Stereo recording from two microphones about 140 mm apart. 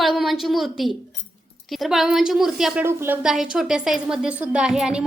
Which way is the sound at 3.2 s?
5° right (ahead or behind).